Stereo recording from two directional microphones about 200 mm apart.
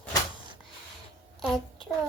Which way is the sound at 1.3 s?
Centre (ahead or behind).